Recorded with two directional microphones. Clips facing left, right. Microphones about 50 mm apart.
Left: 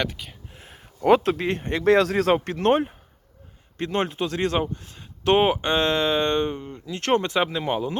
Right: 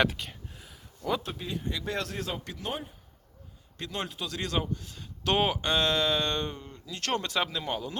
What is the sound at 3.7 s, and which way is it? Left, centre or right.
Speech, left.